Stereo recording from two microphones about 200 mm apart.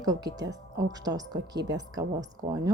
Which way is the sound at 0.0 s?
20° right (ahead or behind).